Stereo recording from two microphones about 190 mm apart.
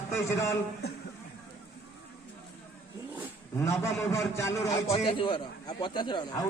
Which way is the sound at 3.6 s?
15° left (ahead or behind).